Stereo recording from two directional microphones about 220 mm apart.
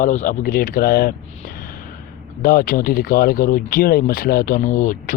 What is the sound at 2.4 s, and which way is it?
Speech, 40° left (ahead or behind).